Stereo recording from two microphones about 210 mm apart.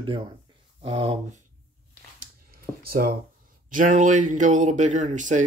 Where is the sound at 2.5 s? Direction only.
45° right (ahead or behind).